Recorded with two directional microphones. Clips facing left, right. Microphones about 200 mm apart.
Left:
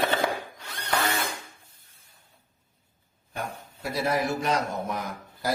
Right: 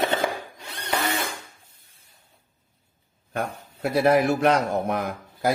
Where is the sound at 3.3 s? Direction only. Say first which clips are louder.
Right 6 dB; 60° right (ahead or behind).